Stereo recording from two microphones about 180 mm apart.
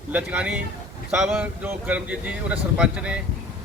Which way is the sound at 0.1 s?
10° right (ahead or behind).